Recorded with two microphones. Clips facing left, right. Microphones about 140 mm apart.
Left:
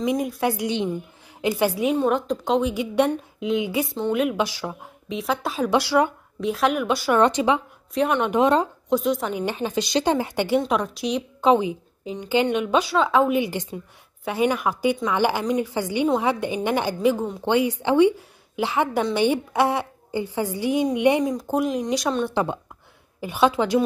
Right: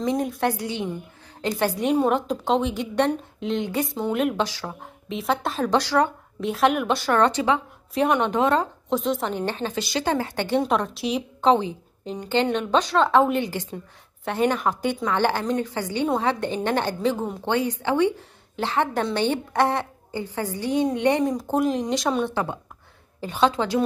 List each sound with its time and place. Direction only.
0.0 s a woman's voice: 10° left (ahead or behind)
2.0 s a woman's voice: 5° right (ahead or behind)
6.4 s a woman's voice: centre (ahead or behind)
7.2 s a woman's voice: 15° left (ahead or behind)
7.9 s a woman's voice: centre (ahead or behind)
8.2 s a woman's voice: 15° left (ahead or behind)
8.8 s a woman's voice: centre (ahead or behind)
9.4 s a woman's voice: 10° left (ahead or behind)
10.7 s a woman's voice: centre (ahead or behind)
11.4 s a woman's voice: 10° left (ahead or behind)
13.5 s a woman's voice: 20° left (ahead or behind)
14.2 s a woman's voice: 5° left (ahead or behind)
21.4 s a woman's voice: centre (ahead or behind)
22.3 s a woman's voice: 20° left (ahead or behind)